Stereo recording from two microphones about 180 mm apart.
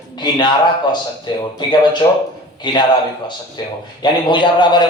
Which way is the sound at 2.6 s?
25° left (ahead or behind).